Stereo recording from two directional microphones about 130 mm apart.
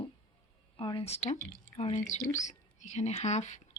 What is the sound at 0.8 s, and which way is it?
Speech, 45° left (ahead or behind).